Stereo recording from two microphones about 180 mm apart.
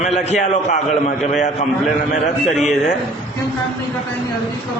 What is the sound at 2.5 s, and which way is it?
Speech, centre (ahead or behind).